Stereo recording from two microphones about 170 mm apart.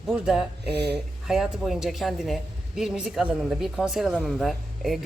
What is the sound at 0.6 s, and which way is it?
Speech, 75° right (ahead or behind).